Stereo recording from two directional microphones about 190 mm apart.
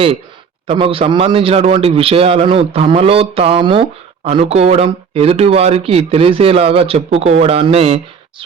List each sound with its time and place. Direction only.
0.7 s a man's voice: 30° right (ahead or behind)